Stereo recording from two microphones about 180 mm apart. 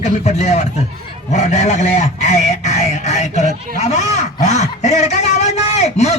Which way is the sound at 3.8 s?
40° left (ahead or behind).